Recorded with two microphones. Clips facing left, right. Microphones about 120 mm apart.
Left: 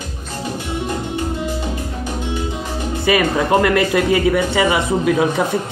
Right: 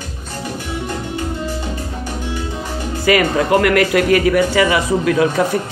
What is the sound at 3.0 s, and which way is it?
A man's voice, 25° left (ahead or behind).